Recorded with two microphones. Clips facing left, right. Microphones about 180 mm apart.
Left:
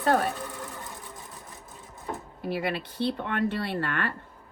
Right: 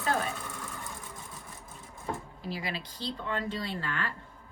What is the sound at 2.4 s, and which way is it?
Speech, 60° left (ahead or behind).